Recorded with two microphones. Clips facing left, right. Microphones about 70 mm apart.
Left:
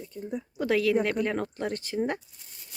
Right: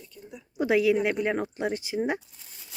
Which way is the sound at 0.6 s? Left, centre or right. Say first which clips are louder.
Right 2 dB; centre.